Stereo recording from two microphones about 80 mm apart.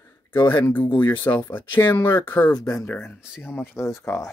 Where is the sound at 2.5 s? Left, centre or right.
Left.